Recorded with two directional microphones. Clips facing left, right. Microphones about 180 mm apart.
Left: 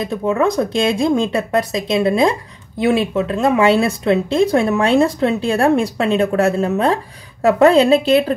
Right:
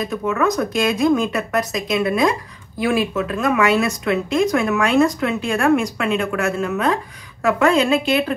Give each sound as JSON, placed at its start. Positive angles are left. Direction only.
{"t": 0.0, "sound": "speech", "side_deg": 30}